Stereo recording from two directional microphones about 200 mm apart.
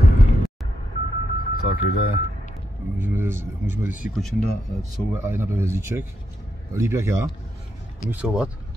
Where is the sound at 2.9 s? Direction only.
10° right (ahead or behind).